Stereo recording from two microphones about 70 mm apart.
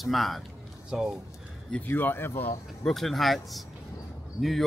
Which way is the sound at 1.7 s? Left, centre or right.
Left.